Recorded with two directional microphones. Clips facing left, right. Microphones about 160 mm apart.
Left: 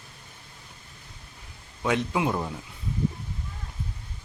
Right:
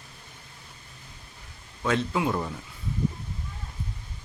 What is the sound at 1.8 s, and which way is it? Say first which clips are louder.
Speech: even; 15° left (ahead or behind).